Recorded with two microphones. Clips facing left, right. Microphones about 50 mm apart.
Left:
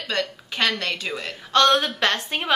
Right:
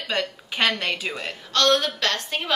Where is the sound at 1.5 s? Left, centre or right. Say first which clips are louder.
Left 3 dB; centre.